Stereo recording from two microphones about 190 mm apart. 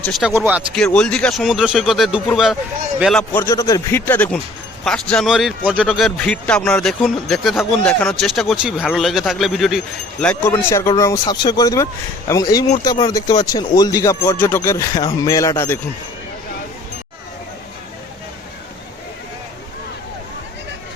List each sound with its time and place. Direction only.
0.0 s speech: centre (ahead or behind)
0.9 s speech: 5° left (ahead or behind)
3.4 s speech: 15° left (ahead or behind)